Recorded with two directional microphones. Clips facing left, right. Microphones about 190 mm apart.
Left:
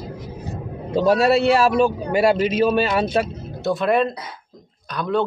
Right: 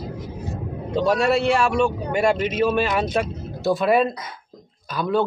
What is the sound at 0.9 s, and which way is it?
Speech, 5° left (ahead or behind).